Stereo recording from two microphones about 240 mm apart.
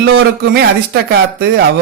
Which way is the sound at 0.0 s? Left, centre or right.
Right.